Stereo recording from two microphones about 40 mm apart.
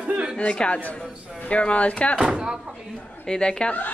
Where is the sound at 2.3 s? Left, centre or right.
Right.